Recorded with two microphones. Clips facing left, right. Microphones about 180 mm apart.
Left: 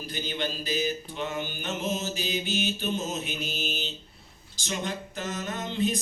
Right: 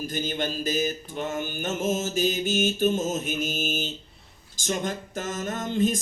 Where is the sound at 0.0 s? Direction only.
45° right (ahead or behind).